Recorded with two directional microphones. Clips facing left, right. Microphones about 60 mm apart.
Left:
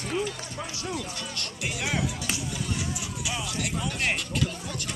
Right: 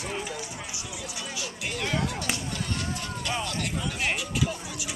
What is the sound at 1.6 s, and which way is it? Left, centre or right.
Music, centre.